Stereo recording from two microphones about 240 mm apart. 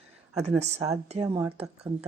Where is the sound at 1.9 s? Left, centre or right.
Right.